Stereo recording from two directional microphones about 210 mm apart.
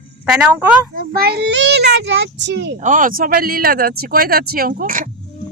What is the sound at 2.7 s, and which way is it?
Speech, 40° right (ahead or behind).